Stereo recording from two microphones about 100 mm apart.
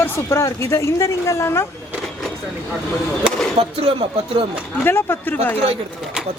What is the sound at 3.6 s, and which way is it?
Speech, 90° right.